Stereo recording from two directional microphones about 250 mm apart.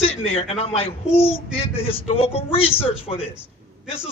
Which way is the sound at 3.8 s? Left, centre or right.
Left.